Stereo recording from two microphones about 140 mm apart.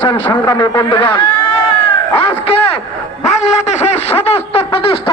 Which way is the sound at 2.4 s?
45° left (ahead or behind).